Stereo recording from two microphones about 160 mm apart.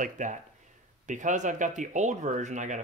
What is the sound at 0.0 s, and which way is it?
Speech, 50° right (ahead or behind).